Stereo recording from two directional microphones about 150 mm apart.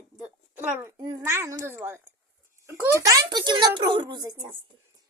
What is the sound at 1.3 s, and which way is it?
Speech, 15° right (ahead or behind).